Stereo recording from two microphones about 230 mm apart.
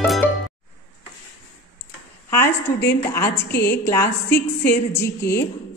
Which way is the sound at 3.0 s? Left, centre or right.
Centre.